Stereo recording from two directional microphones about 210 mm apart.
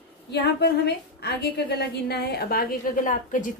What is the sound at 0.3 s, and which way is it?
A woman's voice, 50° left (ahead or behind).